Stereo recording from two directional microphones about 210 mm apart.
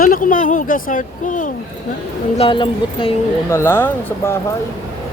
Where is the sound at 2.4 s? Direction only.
25° left (ahead or behind).